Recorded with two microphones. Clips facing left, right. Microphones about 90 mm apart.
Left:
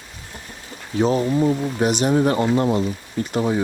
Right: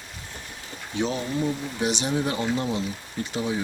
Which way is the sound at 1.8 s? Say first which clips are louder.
Left 7 dB; 50° left (ahead or behind).